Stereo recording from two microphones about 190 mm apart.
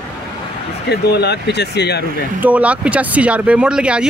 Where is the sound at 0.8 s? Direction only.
60° left (ahead or behind).